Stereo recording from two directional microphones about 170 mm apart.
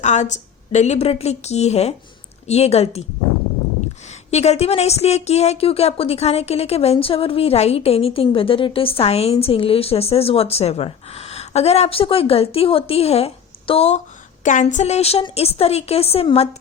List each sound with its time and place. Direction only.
0.0 s a woman's voice: 45° left (ahead or behind)
4.3 s speech: 40° left (ahead or behind)
14.4 s speech: 50° left (ahead or behind)